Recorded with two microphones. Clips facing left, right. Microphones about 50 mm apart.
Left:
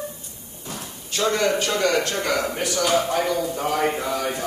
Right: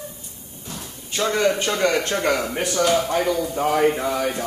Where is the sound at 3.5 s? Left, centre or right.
Centre.